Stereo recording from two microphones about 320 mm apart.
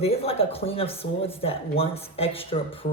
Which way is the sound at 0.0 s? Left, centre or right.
Centre.